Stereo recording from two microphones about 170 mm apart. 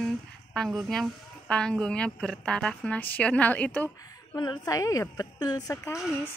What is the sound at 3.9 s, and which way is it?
A woman's voice, 20° left (ahead or behind).